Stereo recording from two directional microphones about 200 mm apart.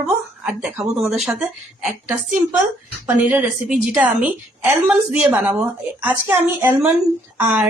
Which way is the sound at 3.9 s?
5° right (ahead or behind).